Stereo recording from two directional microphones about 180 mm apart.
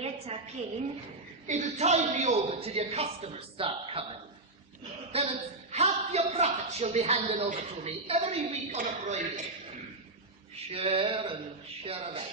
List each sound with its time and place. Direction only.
0.0 s a sound: 35° right (ahead or behind)
1.5 s a woman's voice: 40° right (ahead or behind)
5.1 s a woman's voice: 35° right (ahead or behind)
10.7 s a woman's voice: 30° right (ahead or behind)